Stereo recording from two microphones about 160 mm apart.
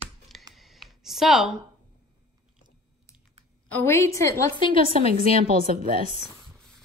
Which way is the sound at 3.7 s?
15° left (ahead or behind).